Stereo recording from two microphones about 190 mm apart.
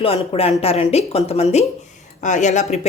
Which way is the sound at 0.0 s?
30° left (ahead or behind).